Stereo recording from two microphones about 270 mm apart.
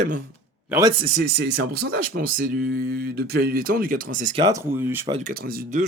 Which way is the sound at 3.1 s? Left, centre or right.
Right.